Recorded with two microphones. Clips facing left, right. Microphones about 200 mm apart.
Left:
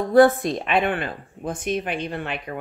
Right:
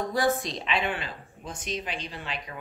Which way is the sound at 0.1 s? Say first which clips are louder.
Left 15 dB; 55° left (ahead or behind).